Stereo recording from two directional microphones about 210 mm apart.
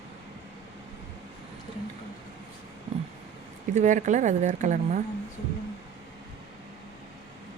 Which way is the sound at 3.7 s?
35° right (ahead or behind).